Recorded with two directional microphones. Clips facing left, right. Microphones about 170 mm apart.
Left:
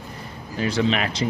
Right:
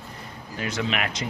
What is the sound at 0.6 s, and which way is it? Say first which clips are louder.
Speech: left 6 dB; 30° left (ahead or behind).